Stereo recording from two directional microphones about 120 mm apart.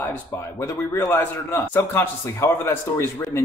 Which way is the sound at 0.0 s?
20° left (ahead or behind).